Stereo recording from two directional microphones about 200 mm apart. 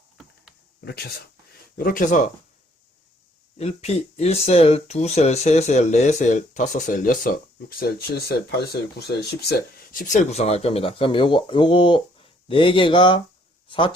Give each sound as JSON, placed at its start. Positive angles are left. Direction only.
{"t": 0.9, "sound": "speech", "side_deg": 50}
{"t": 3.6, "sound": "speech", "side_deg": 30}